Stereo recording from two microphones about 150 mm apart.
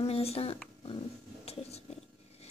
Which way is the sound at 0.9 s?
40° left (ahead or behind).